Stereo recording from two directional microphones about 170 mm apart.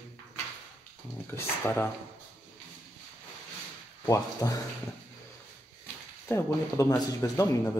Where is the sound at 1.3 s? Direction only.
15° left (ahead or behind).